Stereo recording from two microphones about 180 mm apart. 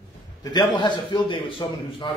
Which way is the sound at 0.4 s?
20° left (ahead or behind).